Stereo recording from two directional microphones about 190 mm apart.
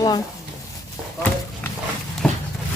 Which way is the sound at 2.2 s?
5° left (ahead or behind).